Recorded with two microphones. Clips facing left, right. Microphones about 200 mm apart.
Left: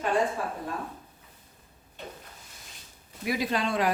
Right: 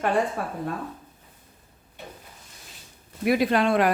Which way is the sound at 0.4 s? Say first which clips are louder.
Right 1 dB; 60° right (ahead or behind).